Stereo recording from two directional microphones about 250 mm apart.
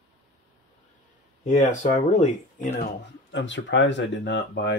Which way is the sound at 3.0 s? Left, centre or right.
Left.